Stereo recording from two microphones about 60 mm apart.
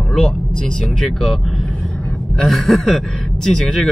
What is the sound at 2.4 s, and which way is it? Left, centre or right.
Speech, centre.